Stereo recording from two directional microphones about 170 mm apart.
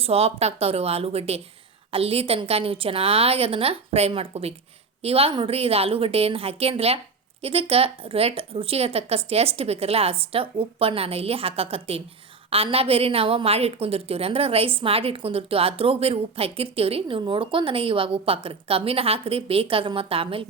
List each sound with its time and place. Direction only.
0.0 s a woman's voice: 35° right (ahead or behind)